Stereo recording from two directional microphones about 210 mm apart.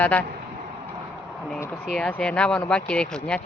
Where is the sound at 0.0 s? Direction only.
5° left (ahead or behind).